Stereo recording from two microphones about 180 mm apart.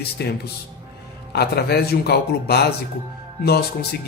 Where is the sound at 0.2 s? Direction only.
65° left (ahead or behind).